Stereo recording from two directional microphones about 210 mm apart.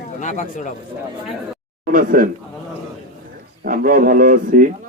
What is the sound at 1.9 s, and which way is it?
Speech, 40° right (ahead or behind).